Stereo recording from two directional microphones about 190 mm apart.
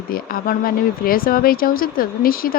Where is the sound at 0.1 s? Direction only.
50° left (ahead or behind).